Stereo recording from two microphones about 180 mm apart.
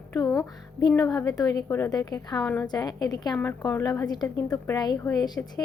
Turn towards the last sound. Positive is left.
turn(degrees=20)  # may be behind; listen again after turning